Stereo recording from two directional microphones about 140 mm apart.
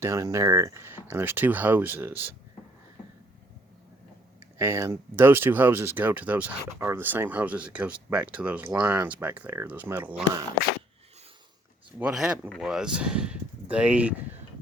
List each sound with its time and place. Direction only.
0.0 s speech: 20° right (ahead or behind)
4.5 s speech: 20° right (ahead or behind)
11.9 s speech: 5° right (ahead or behind)